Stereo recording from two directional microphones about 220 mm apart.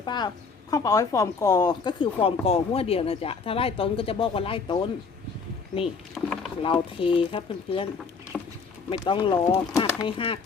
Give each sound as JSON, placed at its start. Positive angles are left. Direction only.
{"t": 0.0, "sound": "a woman's voice", "side_deg": 20}
{"t": 6.2, "sound": "speech", "side_deg": 5}
{"t": 6.6, "sound": "a woman's voice", "side_deg": 25}
{"t": 8.3, "sound": "rowboat", "side_deg": 0}
{"t": 8.9, "sound": "a woman's voice", "side_deg": 25}